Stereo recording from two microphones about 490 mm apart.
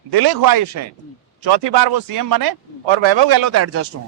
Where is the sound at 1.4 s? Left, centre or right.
Right.